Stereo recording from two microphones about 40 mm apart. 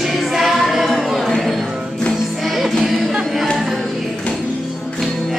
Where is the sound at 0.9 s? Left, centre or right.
Centre.